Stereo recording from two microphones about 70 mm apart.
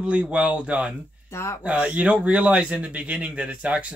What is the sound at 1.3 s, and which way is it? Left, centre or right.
Speech, left.